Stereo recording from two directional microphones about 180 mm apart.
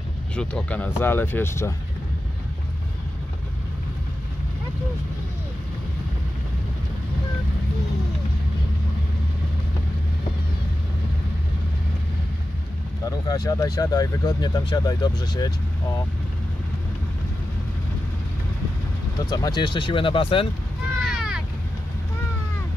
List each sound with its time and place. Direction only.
0.4 s speech: 5° left (ahead or behind)
13.0 s speech: 20° left (ahead or behind)
19.2 s speech: 20° left (ahead or behind)
21.0 s vehicle: centre (ahead or behind)